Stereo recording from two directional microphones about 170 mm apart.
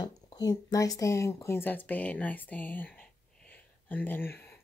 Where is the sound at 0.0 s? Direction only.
25° left (ahead or behind).